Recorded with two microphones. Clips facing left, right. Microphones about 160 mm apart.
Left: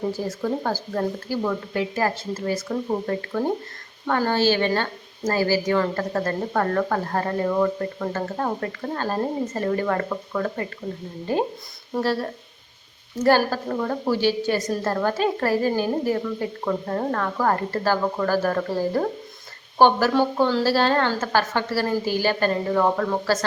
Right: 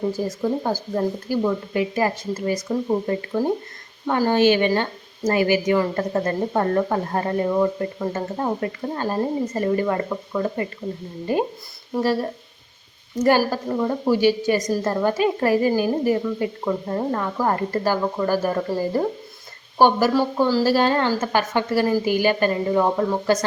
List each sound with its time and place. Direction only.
0.1 s speech: 10° right (ahead or behind)
4.0 s speech: 10° right (ahead or behind)
11.9 s speech: 10° right (ahead or behind)